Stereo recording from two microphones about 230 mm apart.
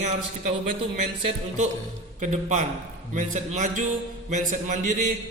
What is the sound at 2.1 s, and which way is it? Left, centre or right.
A man's voice, right.